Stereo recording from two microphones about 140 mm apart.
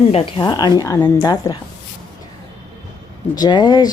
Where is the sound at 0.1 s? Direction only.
40° left (ahead or behind).